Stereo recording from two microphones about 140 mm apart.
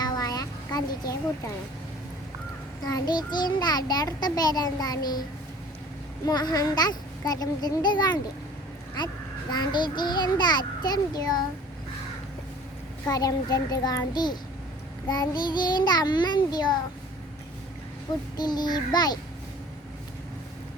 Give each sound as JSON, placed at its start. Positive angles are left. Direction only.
{"t": 0.0, "sound": "a sound", "side_deg": 30}
{"t": 2.8, "sound": "a child's voice", "side_deg": 30}
{"t": 6.2, "sound": "a child's voice", "side_deg": 30}
{"t": 9.5, "sound": "a child's voice", "side_deg": 30}
{"t": 13.1, "sound": "a child's voice", "side_deg": 25}
{"t": 18.3, "sound": "a child's voice", "side_deg": 30}